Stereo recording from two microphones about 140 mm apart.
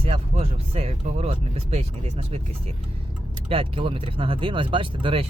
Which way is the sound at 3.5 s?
40° right (ahead or behind).